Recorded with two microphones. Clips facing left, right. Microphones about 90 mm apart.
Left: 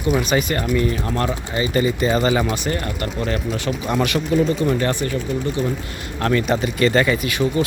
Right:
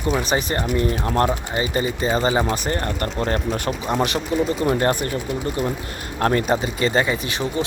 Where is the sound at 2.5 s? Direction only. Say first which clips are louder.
Even; 35° right (ahead or behind).